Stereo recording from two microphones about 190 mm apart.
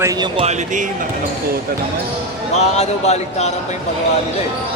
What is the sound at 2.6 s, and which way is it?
Speech, 35° left (ahead or behind).